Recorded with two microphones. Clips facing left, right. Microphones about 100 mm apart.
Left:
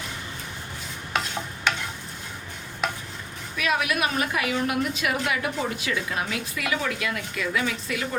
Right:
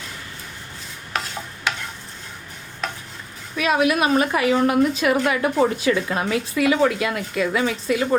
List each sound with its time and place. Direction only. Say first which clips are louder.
3.6 s a woman's voice: right 6 dB; 30° right (ahead or behind)